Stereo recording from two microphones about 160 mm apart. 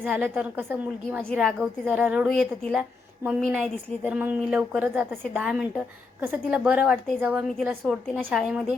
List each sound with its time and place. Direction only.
0.0 s a woman's voice: 5° right (ahead or behind)
1.3 s a woman's voice: 5° left (ahead or behind)
1.9 s a woman's voice: 10° right (ahead or behind)